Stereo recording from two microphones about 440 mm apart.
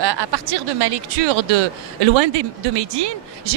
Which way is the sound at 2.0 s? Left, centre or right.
Right.